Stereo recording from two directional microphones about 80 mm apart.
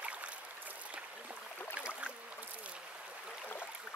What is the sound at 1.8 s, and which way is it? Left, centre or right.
Boat, centre.